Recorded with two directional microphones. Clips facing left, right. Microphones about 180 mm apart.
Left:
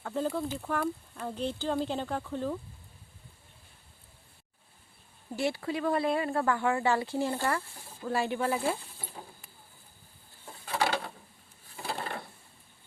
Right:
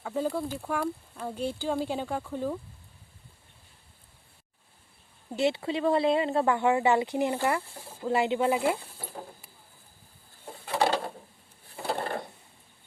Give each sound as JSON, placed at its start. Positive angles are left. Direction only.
{"t": 0.0, "sound": "speech", "side_deg": -5}
{"t": 5.3, "sound": "speech", "side_deg": -20}
{"t": 11.8, "sound": "a sound", "side_deg": -50}